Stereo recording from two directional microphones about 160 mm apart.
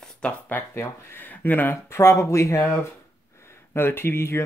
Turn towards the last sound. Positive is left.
turn(degrees=15)  # may be behind; listen again after turning